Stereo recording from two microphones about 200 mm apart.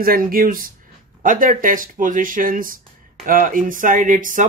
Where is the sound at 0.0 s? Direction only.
45° right (ahead or behind).